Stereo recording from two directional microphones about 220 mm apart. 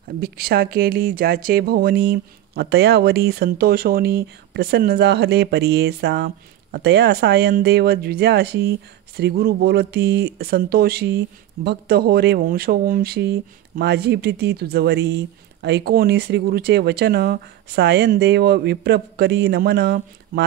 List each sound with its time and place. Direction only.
0.2 s speech: 45° right (ahead or behind)